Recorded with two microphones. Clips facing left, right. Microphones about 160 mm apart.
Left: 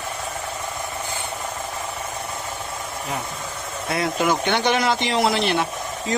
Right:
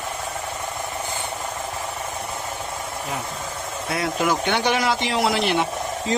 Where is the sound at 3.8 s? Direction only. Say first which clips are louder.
Left 1 dB; centre (ahead or behind).